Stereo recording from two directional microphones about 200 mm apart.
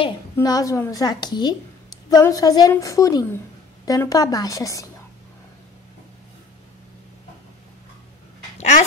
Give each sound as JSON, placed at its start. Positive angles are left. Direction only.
{"t": 0.0, "sound": "a woman's voice", "side_deg": 20}
{"t": 8.5, "sound": "speech", "side_deg": 35}